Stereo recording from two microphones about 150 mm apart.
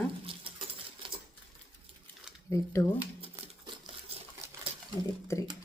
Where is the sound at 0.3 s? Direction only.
35° right (ahead or behind).